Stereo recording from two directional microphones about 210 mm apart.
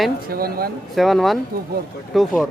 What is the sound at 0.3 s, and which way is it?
Speech, 45° right (ahead or behind).